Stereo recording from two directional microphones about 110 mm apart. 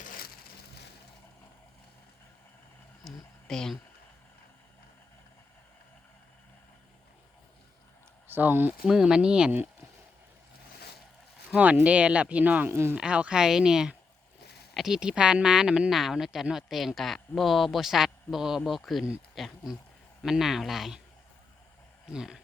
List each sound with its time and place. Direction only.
3.0 s a sound: 5° left (ahead or behind)
8.3 s speech: 15° right (ahead or behind)
8.9 s speech: 5° right (ahead or behind)
11.5 s speech: 10° right (ahead or behind)
12.7 s speech: 25° right (ahead or behind)
13.0 s speech: 10° right (ahead or behind)
22.1 s speech: 5° right (ahead or behind)